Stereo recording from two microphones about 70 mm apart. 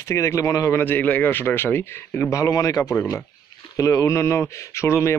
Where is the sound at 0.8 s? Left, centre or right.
Left.